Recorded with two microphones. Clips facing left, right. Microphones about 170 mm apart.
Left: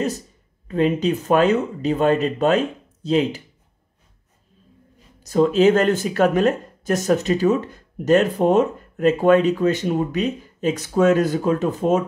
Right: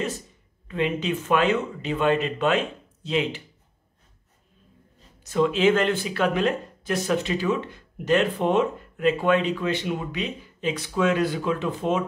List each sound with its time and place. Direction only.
0.7 s speech: 40° left (ahead or behind)
5.2 s speech: 40° left (ahead or behind)